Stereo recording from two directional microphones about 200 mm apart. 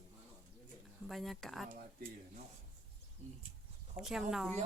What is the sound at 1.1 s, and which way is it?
Speech, centre (ahead or behind).